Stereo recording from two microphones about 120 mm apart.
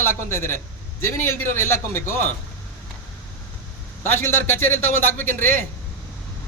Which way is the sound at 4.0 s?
20° left (ahead or behind).